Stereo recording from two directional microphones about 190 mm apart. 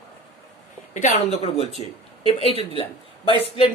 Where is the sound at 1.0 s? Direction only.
35° left (ahead or behind).